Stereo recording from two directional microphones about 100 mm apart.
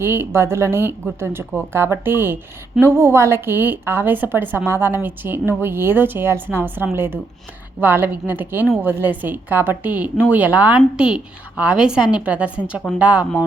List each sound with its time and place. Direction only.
0.0 s a woman's voice: 20° right (ahead or behind)